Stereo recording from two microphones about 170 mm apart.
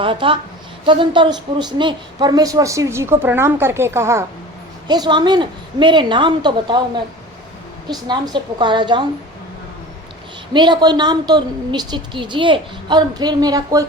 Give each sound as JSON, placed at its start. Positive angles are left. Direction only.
{"t": 0.0, "sound": "a woman's voice", "side_deg": -30}
{"t": 8.0, "sound": "a woman's voice", "side_deg": -25}
{"t": 10.5, "sound": "a woman's voice", "side_deg": -25}